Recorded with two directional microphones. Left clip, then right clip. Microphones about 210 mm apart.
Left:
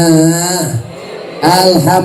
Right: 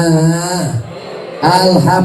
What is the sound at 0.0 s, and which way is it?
Speech, 25° left (ahead or behind).